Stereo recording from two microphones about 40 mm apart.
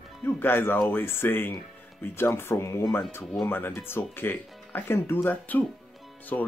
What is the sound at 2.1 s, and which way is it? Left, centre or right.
Speech, left.